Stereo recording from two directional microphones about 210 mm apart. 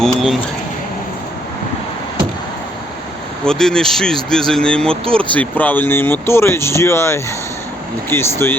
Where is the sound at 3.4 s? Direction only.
5° left (ahead or behind).